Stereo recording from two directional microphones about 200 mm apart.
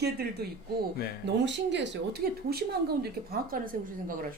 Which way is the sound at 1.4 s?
60° right (ahead or behind).